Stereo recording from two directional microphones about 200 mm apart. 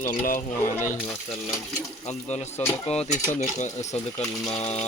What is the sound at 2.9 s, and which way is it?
Speech, 30° left (ahead or behind).